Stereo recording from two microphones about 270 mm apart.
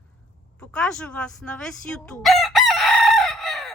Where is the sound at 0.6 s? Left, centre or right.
Centre.